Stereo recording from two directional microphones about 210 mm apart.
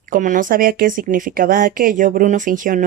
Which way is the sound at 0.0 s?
40° right (ahead or behind).